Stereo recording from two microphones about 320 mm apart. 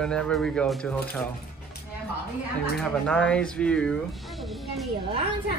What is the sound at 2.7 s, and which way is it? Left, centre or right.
Speech, centre.